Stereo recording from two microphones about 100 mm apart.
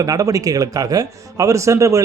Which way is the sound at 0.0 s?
35° right (ahead or behind).